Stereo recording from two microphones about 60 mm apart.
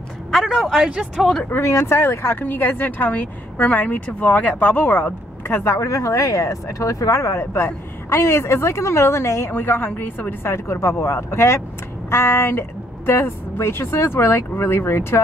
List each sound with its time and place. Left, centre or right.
0.3 s a man's voice: centre
1.6 s speech: left
9.5 s a woman's voice: left
10.5 s speech: left